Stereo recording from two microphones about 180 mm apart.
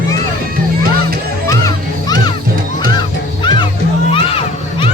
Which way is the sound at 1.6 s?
20° left (ahead or behind).